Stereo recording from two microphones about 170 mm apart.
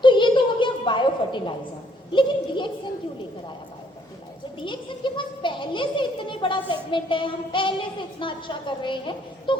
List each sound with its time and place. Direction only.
0.0 s a sound: 30° left (ahead or behind)
2.1 s speech: 30° left (ahead or behind)
4.6 s speech: 30° left (ahead or behind)